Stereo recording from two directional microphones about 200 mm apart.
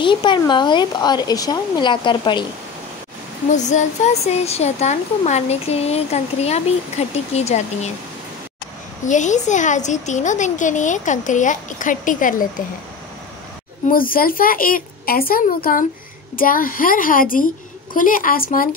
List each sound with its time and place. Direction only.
0.0 s speech: 25° left (ahead or behind)
3.5 s speech: 35° left (ahead or behind)
9.0 s speech: 40° left (ahead or behind)
13.8 s a woman's voice: 45° left (ahead or behind)